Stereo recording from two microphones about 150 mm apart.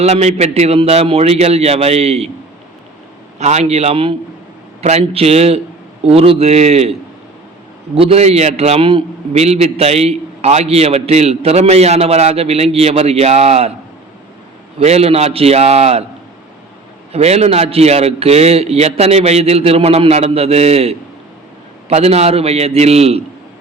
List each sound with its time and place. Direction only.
0.0 s a man's voice: 50° right (ahead or behind)
3.3 s a man's voice: 45° right (ahead or behind)
7.9 s a man's voice: 40° right (ahead or behind)
14.8 s a man's voice: 45° right (ahead or behind)
17.1 s a man's voice: 45° right (ahead or behind)